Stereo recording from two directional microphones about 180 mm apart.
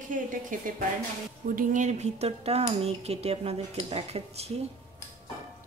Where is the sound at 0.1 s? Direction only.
45° right (ahead or behind).